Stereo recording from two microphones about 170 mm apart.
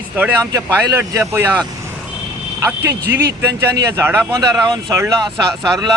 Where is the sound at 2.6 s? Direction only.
10° right (ahead or behind).